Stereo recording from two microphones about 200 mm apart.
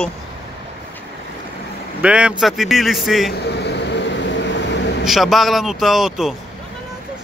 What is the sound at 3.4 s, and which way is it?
Vehicle, 55° left (ahead or behind).